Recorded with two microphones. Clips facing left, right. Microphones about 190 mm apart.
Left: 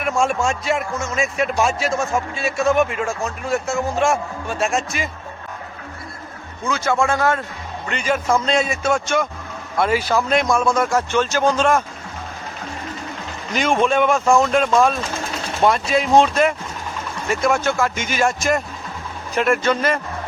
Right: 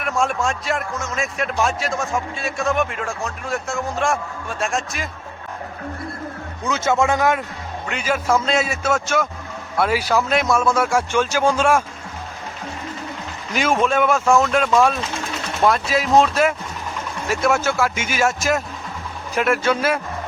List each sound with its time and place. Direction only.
0.0 s speech: centre (ahead or behind)
6.7 s speech: 20° right (ahead or behind)
7.9 s a man's voice: 5° right (ahead or behind)
13.5 s a man's voice: 5° right (ahead or behind)